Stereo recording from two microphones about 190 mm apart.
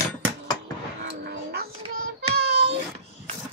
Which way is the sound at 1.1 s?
60° right (ahead or behind).